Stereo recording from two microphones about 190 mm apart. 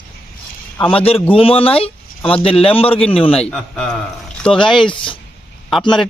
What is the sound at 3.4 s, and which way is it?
Speech, 5° left (ahead or behind).